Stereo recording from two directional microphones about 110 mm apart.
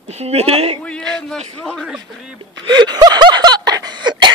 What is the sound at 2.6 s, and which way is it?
Snicker, 40° right (ahead or behind).